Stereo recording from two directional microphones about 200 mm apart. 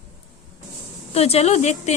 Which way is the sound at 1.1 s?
30° left (ahead or behind).